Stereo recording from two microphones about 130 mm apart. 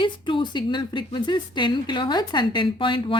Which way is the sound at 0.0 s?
40° left (ahead or behind).